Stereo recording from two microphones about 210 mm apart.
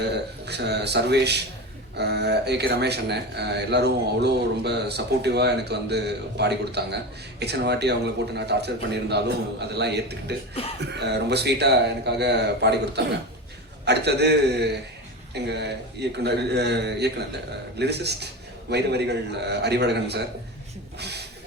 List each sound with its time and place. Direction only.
0.0 s speech: 50° right (ahead or behind)